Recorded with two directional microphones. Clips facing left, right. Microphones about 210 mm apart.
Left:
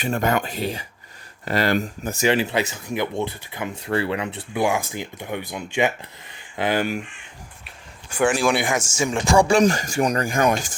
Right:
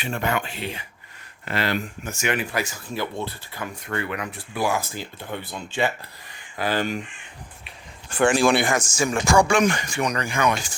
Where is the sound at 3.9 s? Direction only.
30° left (ahead or behind); by 7.0 s 10° left (ahead or behind).